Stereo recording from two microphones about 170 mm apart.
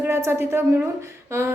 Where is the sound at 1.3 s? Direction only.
15° right (ahead or behind).